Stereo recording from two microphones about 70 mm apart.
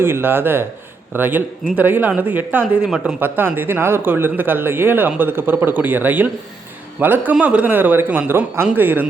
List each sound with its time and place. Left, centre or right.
0.0 s speech: right
2.8 s speech: centre
3.2 s speech: right